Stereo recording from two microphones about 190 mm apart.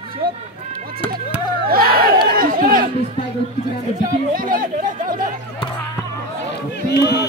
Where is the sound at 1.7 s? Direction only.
50° right (ahead or behind).